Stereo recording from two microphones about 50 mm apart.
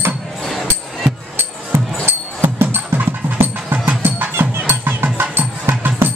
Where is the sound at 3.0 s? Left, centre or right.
Right.